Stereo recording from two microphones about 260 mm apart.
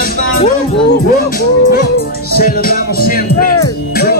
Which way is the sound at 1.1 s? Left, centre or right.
Left.